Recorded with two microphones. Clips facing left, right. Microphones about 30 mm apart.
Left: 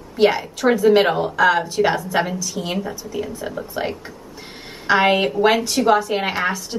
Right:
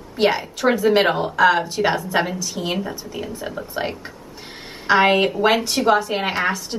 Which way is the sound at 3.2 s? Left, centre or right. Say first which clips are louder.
Left 3 dB; centre.